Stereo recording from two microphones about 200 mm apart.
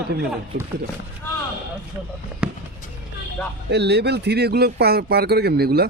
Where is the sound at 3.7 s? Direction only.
55° right (ahead or behind).